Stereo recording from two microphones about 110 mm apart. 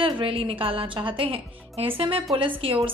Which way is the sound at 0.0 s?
55° right (ahead or behind).